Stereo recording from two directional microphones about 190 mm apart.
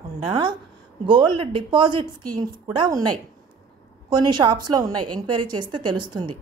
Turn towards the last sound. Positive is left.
turn(degrees=-25)  # may be behind; listen again after turning